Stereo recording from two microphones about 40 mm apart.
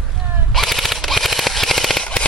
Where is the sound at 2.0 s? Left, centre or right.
Left.